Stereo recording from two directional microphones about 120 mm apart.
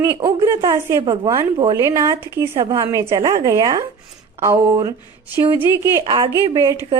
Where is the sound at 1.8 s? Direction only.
25° right (ahead or behind).